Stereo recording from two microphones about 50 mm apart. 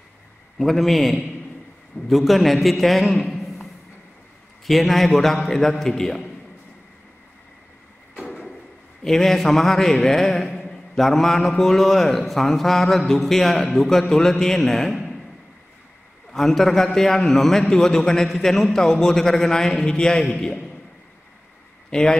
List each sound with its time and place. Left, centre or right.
0.6 s a man's voice: centre
4.6 s a man's voice: centre
9.0 s a man's voice: centre
16.3 s a man's voice: centre
21.9 s a man's voice: centre